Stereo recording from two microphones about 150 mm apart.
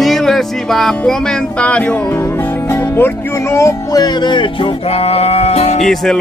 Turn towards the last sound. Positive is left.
turn(degrees=5)  # may be behind; listen again after turning